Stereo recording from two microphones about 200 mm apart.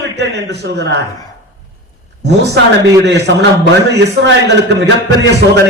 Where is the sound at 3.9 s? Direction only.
60° right (ahead or behind).